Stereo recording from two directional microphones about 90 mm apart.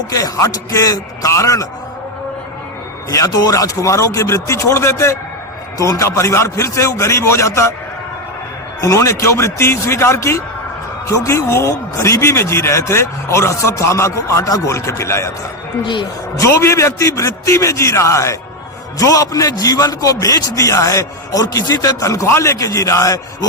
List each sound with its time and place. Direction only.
0.1 s a man's voice: 40° left (ahead or behind)
3.1 s a man's voice: 40° left (ahead or behind)
8.8 s a man's voice: 35° left (ahead or behind)
16.4 s a man's voice: 30° left (ahead or behind)